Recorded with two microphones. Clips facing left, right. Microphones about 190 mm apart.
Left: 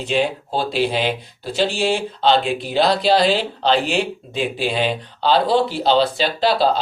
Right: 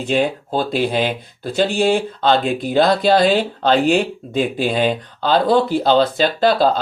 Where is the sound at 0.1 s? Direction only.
50° right (ahead or behind).